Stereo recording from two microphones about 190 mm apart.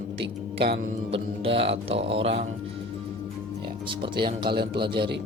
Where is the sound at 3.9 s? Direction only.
25° right (ahead or behind).